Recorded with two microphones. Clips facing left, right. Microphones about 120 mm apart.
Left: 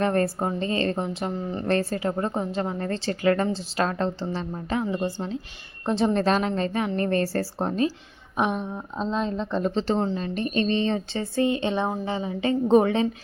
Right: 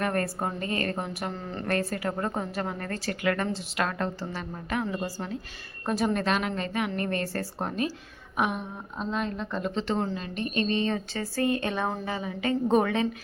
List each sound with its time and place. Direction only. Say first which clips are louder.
0.0 s a woman's voice: left 5 dB; 30° left (ahead or behind)